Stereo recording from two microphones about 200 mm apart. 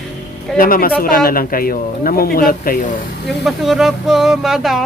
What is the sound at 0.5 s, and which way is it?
Speech, 45° left (ahead or behind).